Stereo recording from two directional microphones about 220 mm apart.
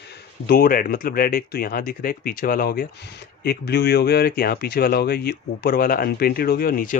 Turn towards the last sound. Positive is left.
turn(degrees=40)  # may be behind; listen again after turning